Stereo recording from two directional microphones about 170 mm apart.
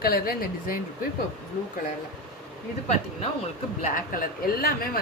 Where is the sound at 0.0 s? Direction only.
65° left (ahead or behind).